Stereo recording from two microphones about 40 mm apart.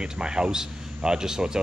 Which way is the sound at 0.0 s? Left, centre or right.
Right.